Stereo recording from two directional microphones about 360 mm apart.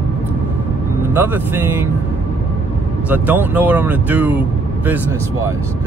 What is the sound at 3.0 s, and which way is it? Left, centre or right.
Speech, centre.